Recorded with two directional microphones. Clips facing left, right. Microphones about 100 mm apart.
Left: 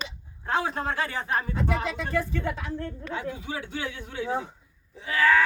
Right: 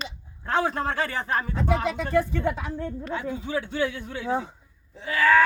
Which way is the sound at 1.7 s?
20° right (ahead or behind).